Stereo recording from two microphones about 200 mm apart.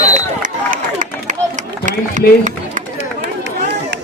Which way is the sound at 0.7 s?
40° right (ahead or behind).